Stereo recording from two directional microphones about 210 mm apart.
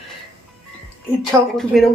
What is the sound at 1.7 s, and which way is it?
Speech, centre (ahead or behind).